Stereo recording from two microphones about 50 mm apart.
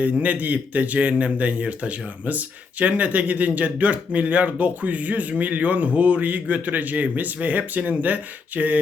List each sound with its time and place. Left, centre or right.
0.0 s speech: right